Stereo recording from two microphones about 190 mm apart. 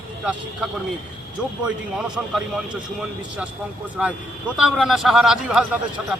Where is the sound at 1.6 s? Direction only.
5° right (ahead or behind).